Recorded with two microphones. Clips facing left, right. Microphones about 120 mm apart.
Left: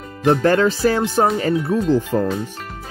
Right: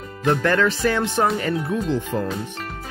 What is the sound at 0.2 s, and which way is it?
Speech, 30° left (ahead or behind).